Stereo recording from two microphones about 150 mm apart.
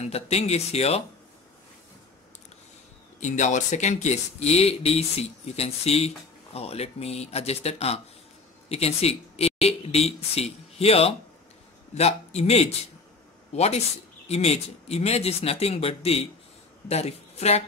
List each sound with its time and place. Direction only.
0.0 s speech: 45° left (ahead or behind)
3.2 s a man's voice: 55° left (ahead or behind)